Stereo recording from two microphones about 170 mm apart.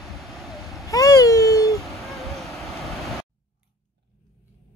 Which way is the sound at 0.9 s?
20° left (ahead or behind).